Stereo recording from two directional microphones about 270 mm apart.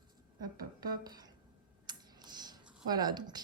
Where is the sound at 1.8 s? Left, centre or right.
Centre.